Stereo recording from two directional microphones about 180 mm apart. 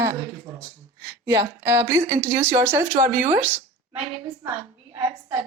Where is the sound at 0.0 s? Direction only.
15° right (ahead or behind).